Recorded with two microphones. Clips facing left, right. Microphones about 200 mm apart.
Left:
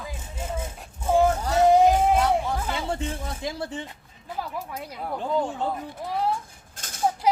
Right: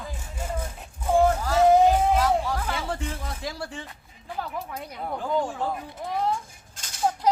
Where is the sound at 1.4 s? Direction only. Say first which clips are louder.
Left 1 dB; 20° left (ahead or behind).